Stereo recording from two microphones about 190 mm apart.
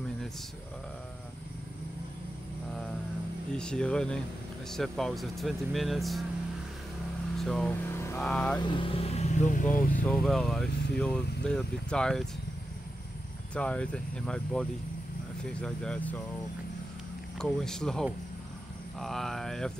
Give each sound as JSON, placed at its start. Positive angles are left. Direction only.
{"t": 3.5, "sound": "speech", "side_deg": 5}
{"t": 7.3, "sound": "speech", "side_deg": 5}
{"t": 8.5, "sound": "speech", "side_deg": 25}
{"t": 10.0, "sound": "speech", "side_deg": 0}
{"t": 13.6, "sound": "speech", "side_deg": 5}
{"t": 17.4, "sound": "speech", "side_deg": 5}